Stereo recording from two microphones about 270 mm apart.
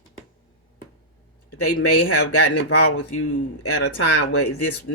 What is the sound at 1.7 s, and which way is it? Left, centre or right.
Speech, left.